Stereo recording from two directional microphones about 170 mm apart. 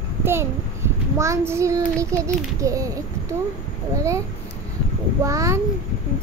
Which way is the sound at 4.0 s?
15° right (ahead or behind).